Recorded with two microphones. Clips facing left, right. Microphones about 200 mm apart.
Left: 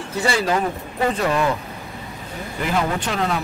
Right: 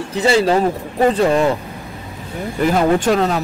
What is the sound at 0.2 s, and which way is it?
Speech, 25° right (ahead or behind).